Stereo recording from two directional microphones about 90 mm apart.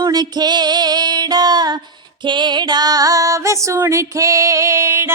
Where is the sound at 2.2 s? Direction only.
60° right (ahead or behind).